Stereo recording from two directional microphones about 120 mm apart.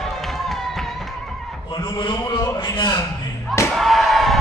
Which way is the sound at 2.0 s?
35° left (ahead or behind).